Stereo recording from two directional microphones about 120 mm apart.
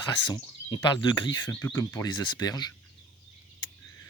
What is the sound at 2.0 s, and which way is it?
Speech, 35° left (ahead or behind).